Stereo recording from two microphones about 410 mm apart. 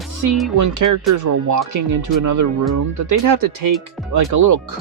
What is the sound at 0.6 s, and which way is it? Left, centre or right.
Speech, right.